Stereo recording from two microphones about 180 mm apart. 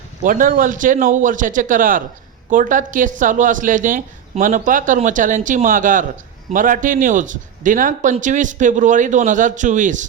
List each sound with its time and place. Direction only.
0.2 s speech: 50° right (ahead or behind)